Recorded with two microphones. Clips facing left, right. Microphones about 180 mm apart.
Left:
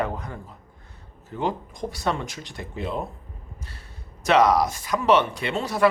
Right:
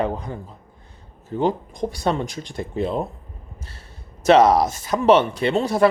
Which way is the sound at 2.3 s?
45° right (ahead or behind).